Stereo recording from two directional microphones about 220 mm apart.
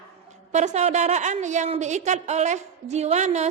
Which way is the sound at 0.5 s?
30° right (ahead or behind).